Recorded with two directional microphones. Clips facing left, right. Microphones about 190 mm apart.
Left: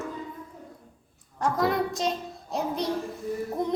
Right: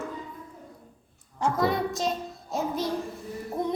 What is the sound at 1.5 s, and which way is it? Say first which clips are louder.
A child's voice: left 1 dB; centre (ahead or behind).